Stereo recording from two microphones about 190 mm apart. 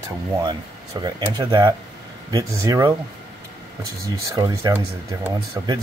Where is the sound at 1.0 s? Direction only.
20° right (ahead or behind).